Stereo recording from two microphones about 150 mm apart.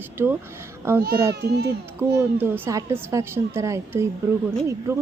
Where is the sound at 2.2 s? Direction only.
15° right (ahead or behind).